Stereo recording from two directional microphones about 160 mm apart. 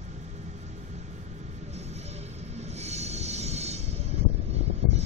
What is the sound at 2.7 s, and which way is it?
Music, 45° right (ahead or behind).